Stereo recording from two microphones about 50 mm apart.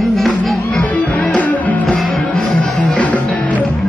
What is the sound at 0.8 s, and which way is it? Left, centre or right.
Music, left.